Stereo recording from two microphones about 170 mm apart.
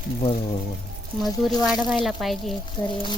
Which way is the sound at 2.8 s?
25° left (ahead or behind).